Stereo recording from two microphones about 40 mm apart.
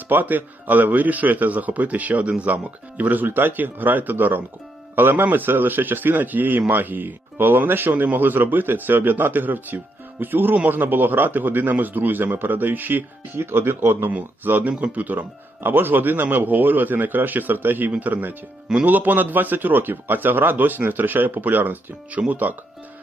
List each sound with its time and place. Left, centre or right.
0.1 s speech: right
3.0 s a man's voice: right
8.0 s speech: right
13.3 s speech: right
14.1 s speech: right
14.7 s speech: right
15.6 s speech: right